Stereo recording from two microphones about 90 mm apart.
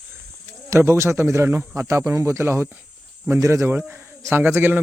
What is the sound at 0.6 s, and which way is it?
Speech, 30° right (ahead or behind).